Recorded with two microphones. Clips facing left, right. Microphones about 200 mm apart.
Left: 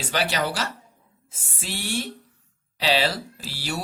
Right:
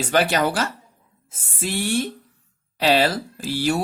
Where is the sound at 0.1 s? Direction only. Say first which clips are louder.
Right 5 dB; 50° right (ahead or behind).